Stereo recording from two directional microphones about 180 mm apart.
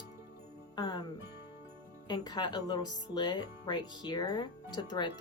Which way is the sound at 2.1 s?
25° left (ahead or behind).